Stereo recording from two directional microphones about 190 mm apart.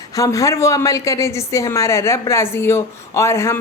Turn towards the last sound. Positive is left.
turn(degrees=15)  # may be behind; listen again after turning